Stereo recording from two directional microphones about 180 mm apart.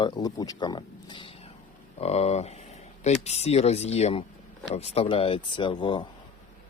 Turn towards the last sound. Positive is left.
turn(degrees=25)  # may be behind; listen again after turning